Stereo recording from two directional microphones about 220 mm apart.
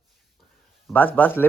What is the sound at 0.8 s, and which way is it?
Speech, 5° left (ahead or behind).